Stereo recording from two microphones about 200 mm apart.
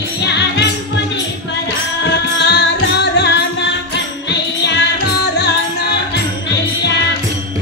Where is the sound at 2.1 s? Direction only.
60° left (ahead or behind).